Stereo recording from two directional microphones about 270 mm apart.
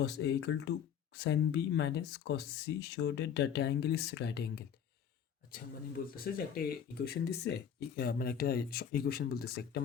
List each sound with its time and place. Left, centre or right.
0.0 s speech: left
6.1 s speech: left